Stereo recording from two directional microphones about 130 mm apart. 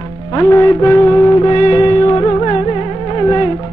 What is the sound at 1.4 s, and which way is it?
Music, 35° left (ahead or behind).